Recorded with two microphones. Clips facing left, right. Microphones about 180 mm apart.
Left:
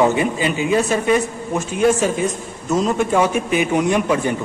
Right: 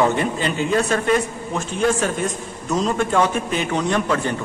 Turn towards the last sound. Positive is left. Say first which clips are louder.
# left 3 dB
turn(degrees=15)  # may be behind; listen again after turning